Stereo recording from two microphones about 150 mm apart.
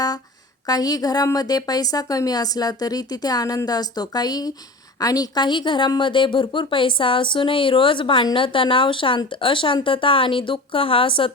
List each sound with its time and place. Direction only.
0.7 s a woman's voice: 25° left (ahead or behind)